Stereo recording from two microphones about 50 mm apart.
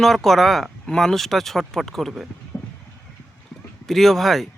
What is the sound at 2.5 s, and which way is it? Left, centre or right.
Clip-clop, left.